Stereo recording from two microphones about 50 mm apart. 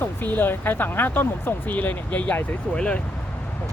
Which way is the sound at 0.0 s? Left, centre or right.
Left.